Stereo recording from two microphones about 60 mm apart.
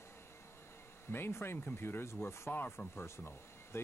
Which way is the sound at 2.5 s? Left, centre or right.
Left.